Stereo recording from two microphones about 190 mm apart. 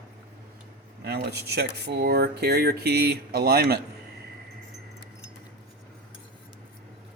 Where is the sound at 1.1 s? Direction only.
60° right (ahead or behind).